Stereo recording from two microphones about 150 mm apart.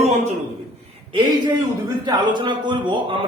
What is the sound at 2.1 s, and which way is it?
Speech, 30° right (ahead or behind).